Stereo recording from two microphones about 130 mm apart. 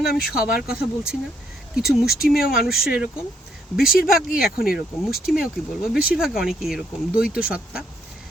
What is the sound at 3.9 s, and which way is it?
Speech, 90° left.